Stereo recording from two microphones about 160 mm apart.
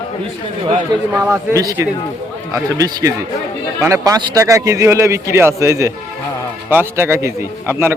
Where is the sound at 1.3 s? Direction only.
20° right (ahead or behind).